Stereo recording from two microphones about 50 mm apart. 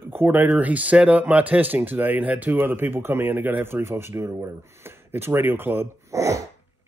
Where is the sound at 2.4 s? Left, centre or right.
Right.